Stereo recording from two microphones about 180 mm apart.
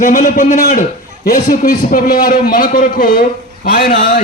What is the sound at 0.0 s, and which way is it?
A man's voice, 45° left (ahead or behind).